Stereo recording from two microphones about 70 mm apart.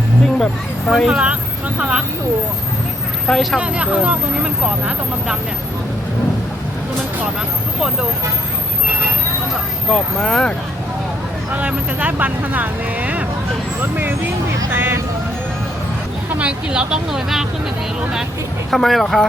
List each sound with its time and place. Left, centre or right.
0.3 s speech: centre
1.1 s speech: centre
3.2 s speech: centre
3.6 s speech: centre
9.9 s speech: centre
11.5 s speech: right
14.7 s speech: right
16.3 s speech: centre
18.7 s speech: centre